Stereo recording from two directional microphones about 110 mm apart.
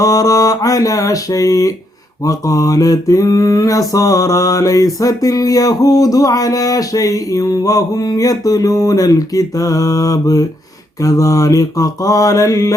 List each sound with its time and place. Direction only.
0.0 s mantra: 30° left (ahead or behind)